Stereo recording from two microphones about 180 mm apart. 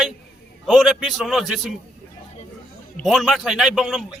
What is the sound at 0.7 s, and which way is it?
A man's voice, centre (ahead or behind).